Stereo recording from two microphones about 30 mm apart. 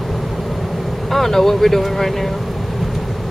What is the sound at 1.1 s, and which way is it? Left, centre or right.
Speech, centre.